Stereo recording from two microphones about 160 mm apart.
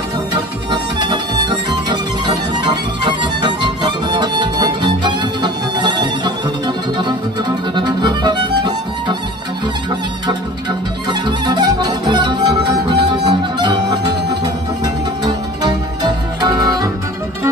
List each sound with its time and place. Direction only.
0.3 s music: 30° right (ahead or behind)
11.1 s music: 25° right (ahead or behind)